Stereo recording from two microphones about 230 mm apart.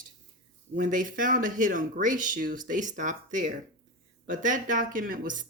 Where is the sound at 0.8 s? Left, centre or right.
Right.